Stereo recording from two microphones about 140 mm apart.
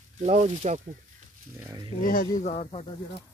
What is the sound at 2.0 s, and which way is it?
Speech, 85° left.